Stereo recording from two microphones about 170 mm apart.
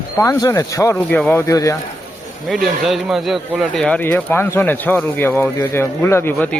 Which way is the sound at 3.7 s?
5° left (ahead or behind).